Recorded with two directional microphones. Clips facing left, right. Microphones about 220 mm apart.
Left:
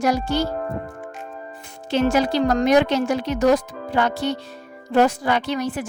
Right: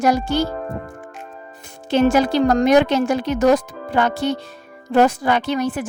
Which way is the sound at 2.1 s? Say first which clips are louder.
Right 3 dB; 50° right (ahead or behind).